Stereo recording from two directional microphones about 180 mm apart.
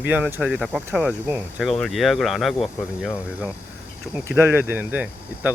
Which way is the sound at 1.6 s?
Centre (ahead or behind).